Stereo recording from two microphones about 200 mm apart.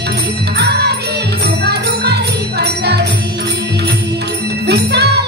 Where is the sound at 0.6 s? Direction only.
55° right (ahead or behind).